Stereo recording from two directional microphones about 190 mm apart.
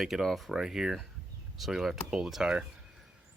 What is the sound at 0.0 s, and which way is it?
Speech, centre (ahead or behind).